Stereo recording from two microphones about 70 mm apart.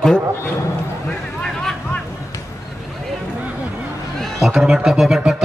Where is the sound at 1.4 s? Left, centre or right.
Centre.